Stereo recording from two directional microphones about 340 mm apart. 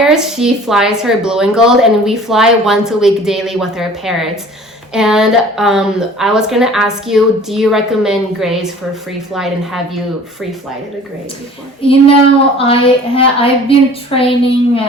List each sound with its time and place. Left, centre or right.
0.0 s a woman's voice: centre
11.8 s a woman's voice: centre